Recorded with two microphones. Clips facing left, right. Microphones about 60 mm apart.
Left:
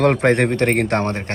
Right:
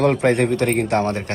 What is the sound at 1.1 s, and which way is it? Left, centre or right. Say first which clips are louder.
Speech: right 1 dB; left.